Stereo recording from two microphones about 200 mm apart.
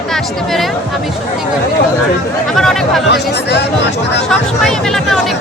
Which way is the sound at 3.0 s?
55° left (ahead or behind).